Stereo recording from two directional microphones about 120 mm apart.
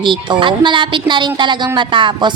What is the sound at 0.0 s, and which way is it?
Speech, 45° right (ahead or behind).